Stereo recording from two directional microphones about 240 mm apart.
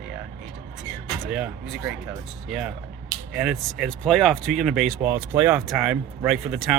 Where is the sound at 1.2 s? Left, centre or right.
Centre.